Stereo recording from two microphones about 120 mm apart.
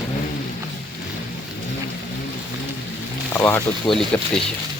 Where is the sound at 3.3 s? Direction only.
20° left (ahead or behind).